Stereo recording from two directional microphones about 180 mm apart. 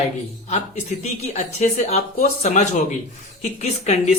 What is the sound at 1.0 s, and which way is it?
Speech, 40° left (ahead or behind).